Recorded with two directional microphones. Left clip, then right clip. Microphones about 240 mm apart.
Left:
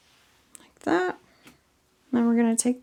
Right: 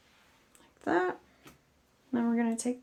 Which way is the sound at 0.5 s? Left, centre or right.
Left.